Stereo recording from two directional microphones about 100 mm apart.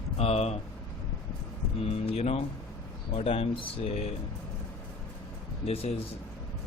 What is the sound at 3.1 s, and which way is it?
Speech, 75° left (ahead or behind).